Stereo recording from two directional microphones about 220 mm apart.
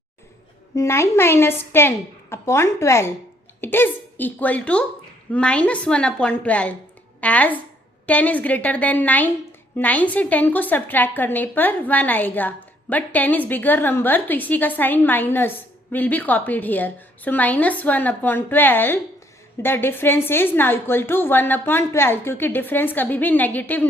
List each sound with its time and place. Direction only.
0.8 s a woman's voice: 10° left (ahead or behind)